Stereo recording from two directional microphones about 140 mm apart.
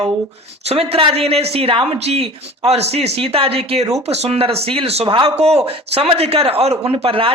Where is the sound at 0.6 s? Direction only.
45° right (ahead or behind).